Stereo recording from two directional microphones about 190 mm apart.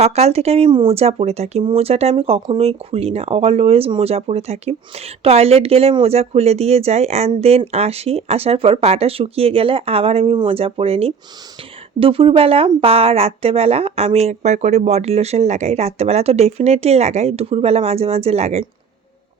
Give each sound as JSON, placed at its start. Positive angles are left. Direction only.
{"t": 0.0, "sound": "speech", "side_deg": -35}